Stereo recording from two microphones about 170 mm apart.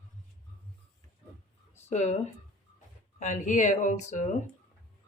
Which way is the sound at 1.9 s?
45° left (ahead or behind).